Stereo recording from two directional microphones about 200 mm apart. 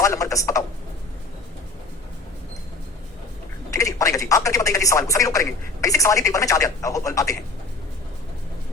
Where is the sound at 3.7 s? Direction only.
15° left (ahead or behind).